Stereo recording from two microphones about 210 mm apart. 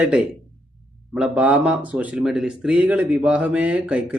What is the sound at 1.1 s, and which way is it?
Speech, 5° right (ahead or behind).